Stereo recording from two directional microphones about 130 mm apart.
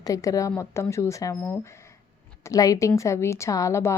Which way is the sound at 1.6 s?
20° left (ahead or behind).